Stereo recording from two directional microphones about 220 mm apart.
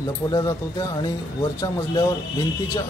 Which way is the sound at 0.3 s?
15° left (ahead or behind).